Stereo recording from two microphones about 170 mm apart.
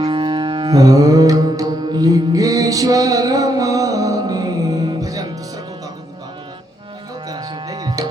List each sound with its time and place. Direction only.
0.0 s music: 30° right (ahead or behind)
7.3 s music: 25° right (ahead or behind)